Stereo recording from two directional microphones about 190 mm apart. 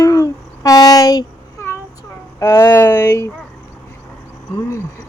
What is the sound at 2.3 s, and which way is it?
Speech, 15° left (ahead or behind).